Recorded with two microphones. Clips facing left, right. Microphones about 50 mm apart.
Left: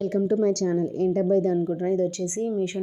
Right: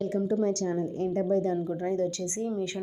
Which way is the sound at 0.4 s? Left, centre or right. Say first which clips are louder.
Left 5 dB; left.